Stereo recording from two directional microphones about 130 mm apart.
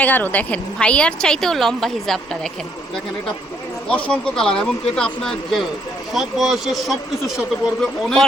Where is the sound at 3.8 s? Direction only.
5° left (ahead or behind).